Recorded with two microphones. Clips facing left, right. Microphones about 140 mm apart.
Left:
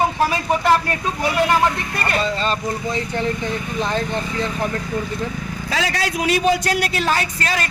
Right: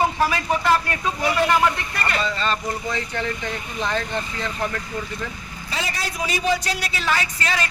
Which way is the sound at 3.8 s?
35° left (ahead or behind).